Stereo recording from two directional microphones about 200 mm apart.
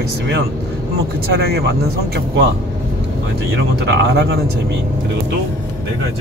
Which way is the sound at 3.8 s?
60° right (ahead or behind).